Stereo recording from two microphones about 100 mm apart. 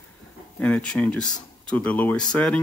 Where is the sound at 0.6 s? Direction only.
10° left (ahead or behind).